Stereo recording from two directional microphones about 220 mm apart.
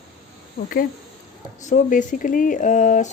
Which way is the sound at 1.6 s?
35° left (ahead or behind).